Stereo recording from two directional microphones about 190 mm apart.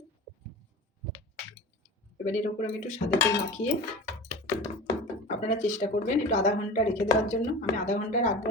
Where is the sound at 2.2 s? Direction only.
40° left (ahead or behind).